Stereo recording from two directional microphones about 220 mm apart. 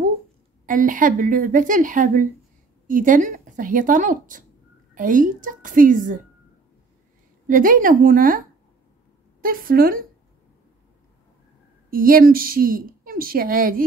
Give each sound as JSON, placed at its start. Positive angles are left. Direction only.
{"t": 0.7, "sound": "a woman's voice", "side_deg": -35}
{"t": 7.4, "sound": "a woman's voice", "side_deg": -40}
{"t": 9.4, "sound": "a woman's voice", "side_deg": -40}
{"t": 11.9, "sound": "a woman's voice", "side_deg": -40}